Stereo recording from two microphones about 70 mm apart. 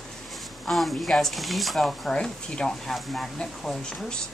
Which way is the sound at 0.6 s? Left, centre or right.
Centre.